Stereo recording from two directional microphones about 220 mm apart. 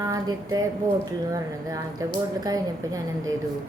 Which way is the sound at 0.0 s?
15° right (ahead or behind).